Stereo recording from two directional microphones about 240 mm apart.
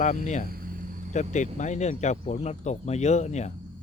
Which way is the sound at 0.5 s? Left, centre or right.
Right.